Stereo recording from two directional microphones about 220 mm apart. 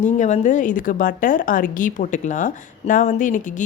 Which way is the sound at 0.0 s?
35° left (ahead or behind).